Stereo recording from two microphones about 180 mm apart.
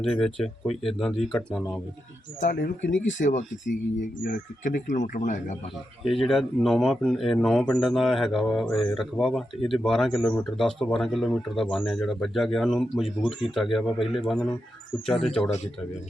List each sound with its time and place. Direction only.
0.0 s speech: 5° left (ahead or behind)
2.4 s speech: 50° left (ahead or behind)
6.1 s speech: centre (ahead or behind)